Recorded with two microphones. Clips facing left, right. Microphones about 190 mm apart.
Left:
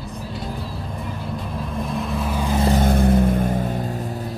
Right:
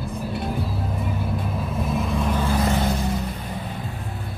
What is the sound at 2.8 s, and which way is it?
Vehicle, 55° left (ahead or behind).